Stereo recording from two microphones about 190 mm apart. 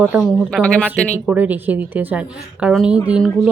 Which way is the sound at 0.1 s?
5° right (ahead or behind).